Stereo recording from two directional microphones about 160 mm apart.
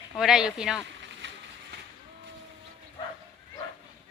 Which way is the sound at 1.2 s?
90° right.